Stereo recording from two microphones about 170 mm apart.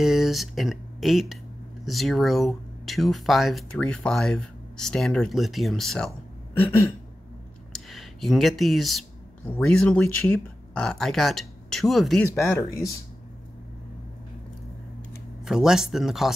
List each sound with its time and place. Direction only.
0.0 s speech: centre (ahead or behind)
7.7 s a sound: centre (ahead or behind)
9.5 s speech: 5° left (ahead or behind)
12.4 s speech: 15° left (ahead or behind)
15.4 s speech: 5° right (ahead or behind)